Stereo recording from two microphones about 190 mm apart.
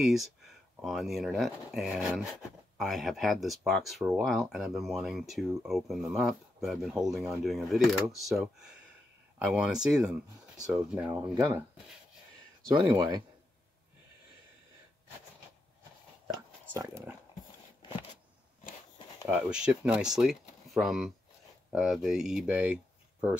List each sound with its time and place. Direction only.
0.0 s speech: centre (ahead or behind)
11.1 s speech: 20° right (ahead or behind)
12.7 s speech: 20° right (ahead or behind)
16.3 s a sound: 20° right (ahead or behind)
19.2 s speech: 10° right (ahead or behind)